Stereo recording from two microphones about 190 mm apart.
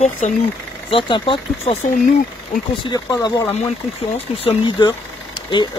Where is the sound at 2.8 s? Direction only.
20° left (ahead or behind).